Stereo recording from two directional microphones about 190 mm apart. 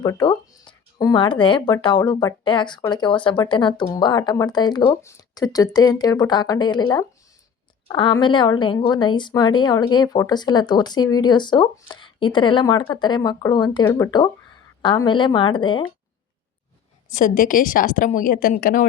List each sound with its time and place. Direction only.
0.0 s a woman's voice: 20° left (ahead or behind)
17.1 s a woman's voice: 45° left (ahead or behind)